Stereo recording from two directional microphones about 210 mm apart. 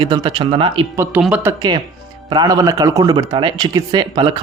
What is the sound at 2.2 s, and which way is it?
A man's voice, 20° right (ahead or behind).